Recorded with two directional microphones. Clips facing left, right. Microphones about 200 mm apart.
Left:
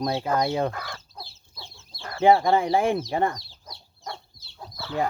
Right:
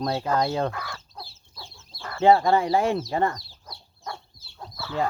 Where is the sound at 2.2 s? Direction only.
15° left (ahead or behind).